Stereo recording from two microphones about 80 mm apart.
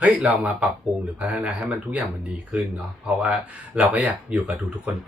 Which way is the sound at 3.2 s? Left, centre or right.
Centre.